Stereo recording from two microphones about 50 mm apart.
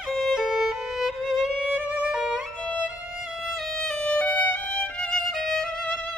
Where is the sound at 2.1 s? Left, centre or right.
Centre.